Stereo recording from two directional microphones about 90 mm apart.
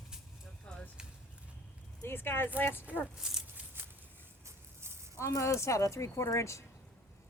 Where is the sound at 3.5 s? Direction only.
25° right (ahead or behind).